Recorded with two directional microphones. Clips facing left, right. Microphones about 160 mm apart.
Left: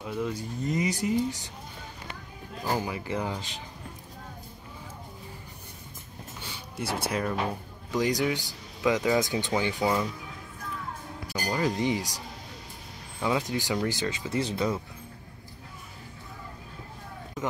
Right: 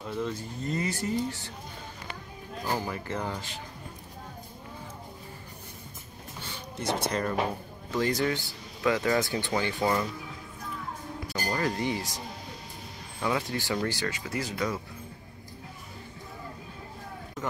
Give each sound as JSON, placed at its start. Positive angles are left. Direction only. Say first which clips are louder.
{"t": 0.0, "sound": "speech", "louder": "left 1 dB", "side_deg": 10}
{"t": 2.7, "sound": "speech", "louder": "left 2 dB", "side_deg": 15}
{"t": 6.4, "sound": "music", "louder": "right 2 dB", "side_deg": 10}
{"t": 7.9, "sound": "speech", "louder": "left 1 dB", "side_deg": 15}
{"t": 11.5, "sound": "speech", "louder": "left 3 dB", "side_deg": 15}
{"t": 13.2, "sound": "speech", "louder": "left 2 dB", "side_deg": 15}